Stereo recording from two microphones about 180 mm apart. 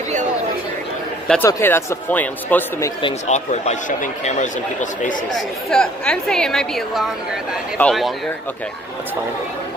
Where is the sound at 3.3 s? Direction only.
40° left (ahead or behind).